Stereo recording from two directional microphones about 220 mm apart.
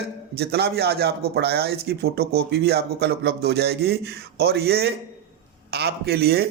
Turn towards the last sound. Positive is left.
turn(degrees=-45)  # may be behind; listen again after turning